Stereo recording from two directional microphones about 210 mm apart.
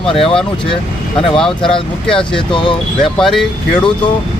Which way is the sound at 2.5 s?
25° left (ahead or behind).